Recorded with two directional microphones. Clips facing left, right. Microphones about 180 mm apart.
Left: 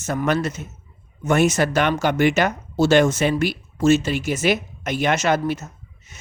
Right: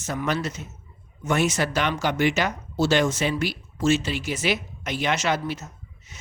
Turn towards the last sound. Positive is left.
turn(degrees=50)  # may be behind; listen again after turning